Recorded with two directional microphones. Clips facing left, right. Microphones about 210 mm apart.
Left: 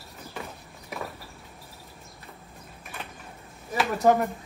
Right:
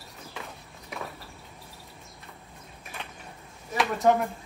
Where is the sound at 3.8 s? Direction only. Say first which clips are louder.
Left 1 dB; centre (ahead or behind).